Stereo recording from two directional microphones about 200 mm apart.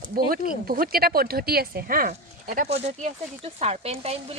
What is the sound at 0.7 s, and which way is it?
Speech, 45° right (ahead or behind).